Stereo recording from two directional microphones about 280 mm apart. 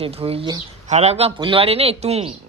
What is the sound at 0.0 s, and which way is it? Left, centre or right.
Speech, right.